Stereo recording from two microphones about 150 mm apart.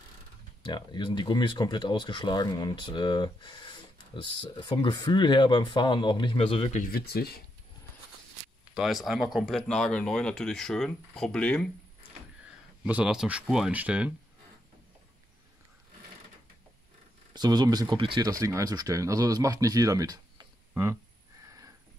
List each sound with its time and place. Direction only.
0.6 s speech: 30° left (ahead or behind)
6.8 s speech: 85° left
8.7 s speech: centre (ahead or behind)
12.8 s speech: 5° right (ahead or behind)
17.3 s speech: 25° right (ahead or behind)
18.4 s speech: 25° right (ahead or behind)